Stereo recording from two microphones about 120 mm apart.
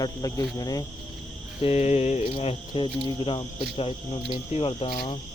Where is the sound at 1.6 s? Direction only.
65° left (ahead or behind).